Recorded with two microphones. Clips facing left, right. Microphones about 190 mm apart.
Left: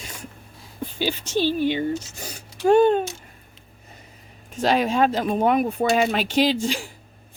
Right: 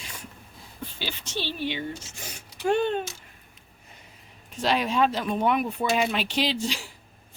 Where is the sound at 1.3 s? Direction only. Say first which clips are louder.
Left 9 dB; 45° left (ahead or behind).